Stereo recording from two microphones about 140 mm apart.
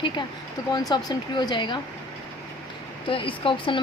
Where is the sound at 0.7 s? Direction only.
30° left (ahead or behind).